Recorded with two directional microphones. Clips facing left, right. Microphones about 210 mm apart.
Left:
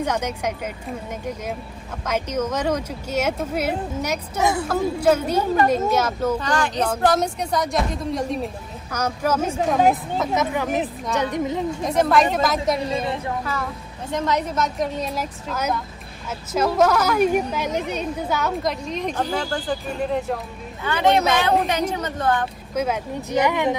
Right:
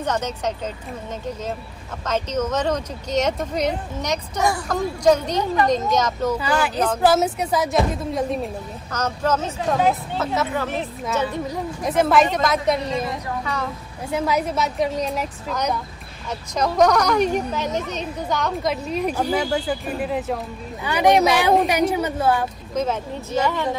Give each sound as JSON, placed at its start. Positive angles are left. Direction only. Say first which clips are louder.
{"t": 0.0, "sound": "speech", "louder": "even", "side_deg": 10}
{"t": 2.0, "sound": "speech", "louder": "right 1 dB", "side_deg": 10}
{"t": 6.3, "sound": "a woman's voice", "louder": "right 1 dB", "side_deg": -5}
{"t": 8.9, "sound": "speech", "louder": "even", "side_deg": 10}
{"t": 11.8, "sound": "a woman's voice", "louder": "right 2 dB", "side_deg": 0}
{"t": 20.8, "sound": "a woman's voice", "louder": "right 2 dB", "side_deg": -15}
{"t": 22.8, "sound": "speech", "louder": "even", "side_deg": 15}